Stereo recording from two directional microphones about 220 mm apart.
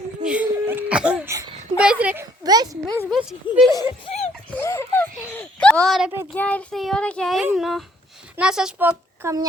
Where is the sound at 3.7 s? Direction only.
20° left (ahead or behind).